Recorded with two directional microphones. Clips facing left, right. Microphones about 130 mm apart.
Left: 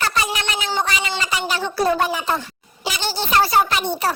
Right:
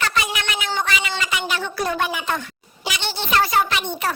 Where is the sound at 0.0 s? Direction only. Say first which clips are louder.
Left 1 dB; 35° left (ahead or behind).